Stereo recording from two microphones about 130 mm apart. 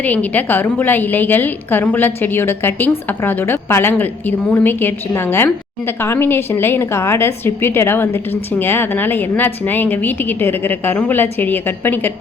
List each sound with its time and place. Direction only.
0.0 s a woman's voice: 10° left (ahead or behind)